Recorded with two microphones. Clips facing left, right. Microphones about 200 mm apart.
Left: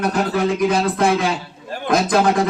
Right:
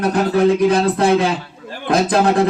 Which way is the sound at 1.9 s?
35° right (ahead or behind).